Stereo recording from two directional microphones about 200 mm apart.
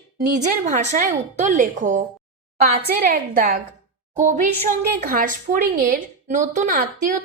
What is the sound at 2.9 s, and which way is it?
A woman's voice, 50° right (ahead or behind).